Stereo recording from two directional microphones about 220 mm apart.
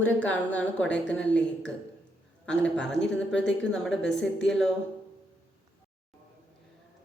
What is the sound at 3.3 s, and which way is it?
Speech, 55° left (ahead or behind).